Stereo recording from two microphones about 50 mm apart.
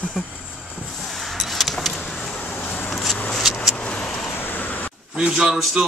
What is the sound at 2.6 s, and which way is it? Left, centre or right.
Vehicle, left.